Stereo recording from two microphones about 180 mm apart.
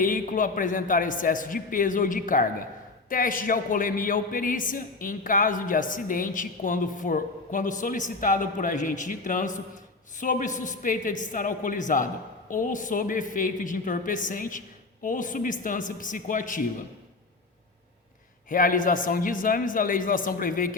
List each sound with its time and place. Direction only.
0.0 s a man's voice: 50° left (ahead or behind)
18.4 s a man's voice: 50° left (ahead or behind)